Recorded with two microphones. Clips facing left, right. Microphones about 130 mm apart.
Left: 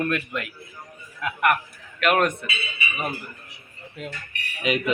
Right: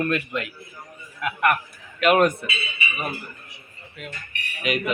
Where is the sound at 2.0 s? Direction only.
5° right (ahead or behind).